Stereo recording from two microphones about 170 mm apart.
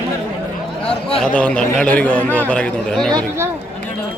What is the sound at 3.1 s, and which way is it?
Speech, 15° right (ahead or behind).